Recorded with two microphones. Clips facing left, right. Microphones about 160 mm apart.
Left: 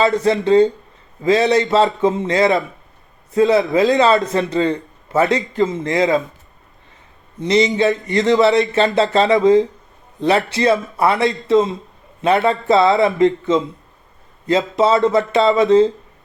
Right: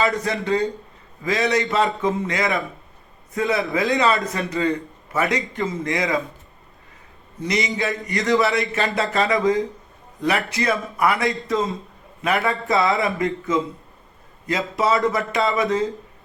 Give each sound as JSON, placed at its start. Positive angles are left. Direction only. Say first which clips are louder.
{"t": 0.2, "sound": "a man's voice", "louder": "left 9 dB", "side_deg": 30}
{"t": 7.3, "sound": "a man's voice", "louder": "left 8 dB", "side_deg": 25}
{"t": 14.8, "sound": "a man's voice", "louder": "left 5 dB", "side_deg": 25}